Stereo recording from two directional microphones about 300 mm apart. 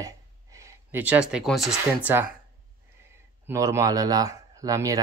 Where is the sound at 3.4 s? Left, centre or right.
Centre.